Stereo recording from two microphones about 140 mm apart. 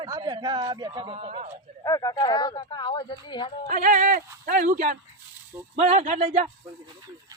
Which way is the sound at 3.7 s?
70° right (ahead or behind).